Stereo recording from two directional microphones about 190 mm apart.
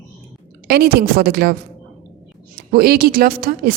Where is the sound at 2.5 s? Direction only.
55° right (ahead or behind).